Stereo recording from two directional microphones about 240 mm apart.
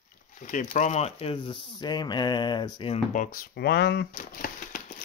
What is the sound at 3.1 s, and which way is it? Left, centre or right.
Speech, left.